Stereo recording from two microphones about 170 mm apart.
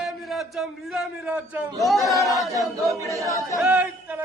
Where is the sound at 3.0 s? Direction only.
20° right (ahead or behind).